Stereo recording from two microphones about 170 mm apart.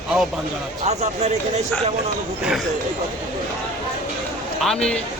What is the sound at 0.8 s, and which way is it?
Speech, 40° right (ahead or behind).